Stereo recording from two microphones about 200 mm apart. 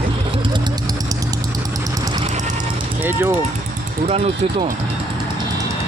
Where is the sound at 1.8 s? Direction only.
20° right (ahead or behind).